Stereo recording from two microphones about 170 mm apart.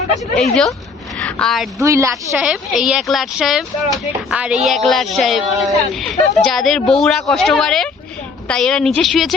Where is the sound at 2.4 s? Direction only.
5° right (ahead or behind).